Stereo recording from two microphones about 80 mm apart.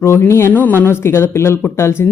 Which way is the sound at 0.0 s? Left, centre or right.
Left.